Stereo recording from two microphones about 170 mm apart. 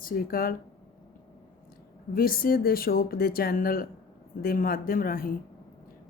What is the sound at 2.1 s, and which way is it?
Speech, 60° left (ahead or behind).